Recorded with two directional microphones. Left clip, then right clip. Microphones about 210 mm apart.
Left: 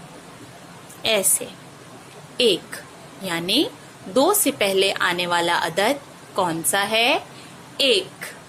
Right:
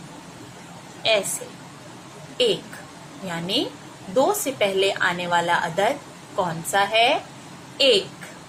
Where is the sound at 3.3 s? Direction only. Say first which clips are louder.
Left 4 dB; 50° left (ahead or behind).